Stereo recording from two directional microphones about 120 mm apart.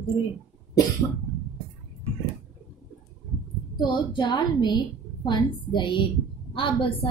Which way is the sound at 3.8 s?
40° left (ahead or behind).